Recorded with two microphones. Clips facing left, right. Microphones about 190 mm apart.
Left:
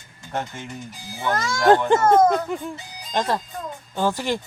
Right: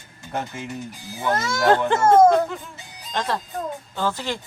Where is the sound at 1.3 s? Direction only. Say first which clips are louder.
Right 1 dB; 25° right (ahead or behind).